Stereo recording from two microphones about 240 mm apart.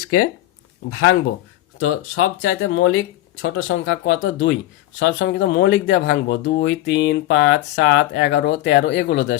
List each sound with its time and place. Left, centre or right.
0.9 s speech: left
1.8 s speech: left